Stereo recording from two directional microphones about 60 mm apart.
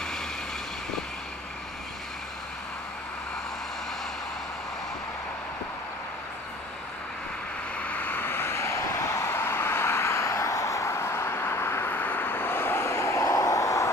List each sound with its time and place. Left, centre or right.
7.7 s vehicle: left